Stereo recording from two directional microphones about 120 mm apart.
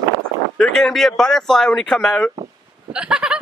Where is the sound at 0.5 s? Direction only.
5° left (ahead or behind).